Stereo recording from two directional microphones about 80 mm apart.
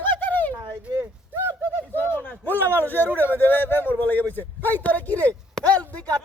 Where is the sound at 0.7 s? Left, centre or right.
Right.